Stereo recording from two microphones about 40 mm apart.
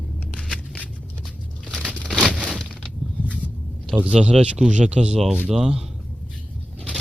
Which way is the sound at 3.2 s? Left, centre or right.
Right.